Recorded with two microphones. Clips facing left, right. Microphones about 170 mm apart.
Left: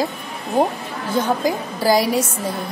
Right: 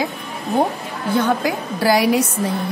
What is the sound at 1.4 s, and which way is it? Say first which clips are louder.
Speech: even; 65° right (ahead or behind).